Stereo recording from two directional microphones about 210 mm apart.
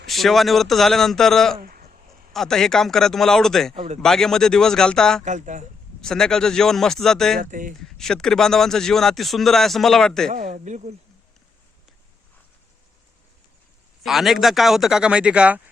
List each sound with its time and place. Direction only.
0.1 s speech: centre (ahead or behind)
5.2 s speech: 35° right (ahead or behind)
6.0 s speech: 5° left (ahead or behind)
7.3 s speech: 40° right (ahead or behind)
7.8 s speech: centre (ahead or behind)
10.3 s speech: 35° right (ahead or behind)
14.0 s speech: centre (ahead or behind)